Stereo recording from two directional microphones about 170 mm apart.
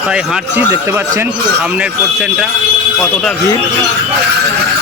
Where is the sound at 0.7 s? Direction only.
15° right (ahead or behind).